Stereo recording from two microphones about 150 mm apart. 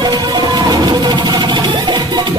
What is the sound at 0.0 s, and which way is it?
Music, 30° right (ahead or behind).